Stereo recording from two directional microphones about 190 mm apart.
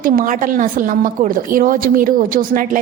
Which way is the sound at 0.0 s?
45° right (ahead or behind).